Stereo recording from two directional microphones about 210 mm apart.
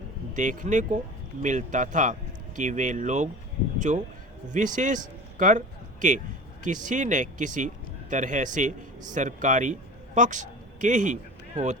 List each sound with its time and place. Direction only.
0.3 s a man's voice: 35° right (ahead or behind)